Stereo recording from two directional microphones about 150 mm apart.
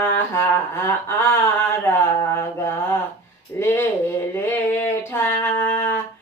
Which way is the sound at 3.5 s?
15° left (ahead or behind).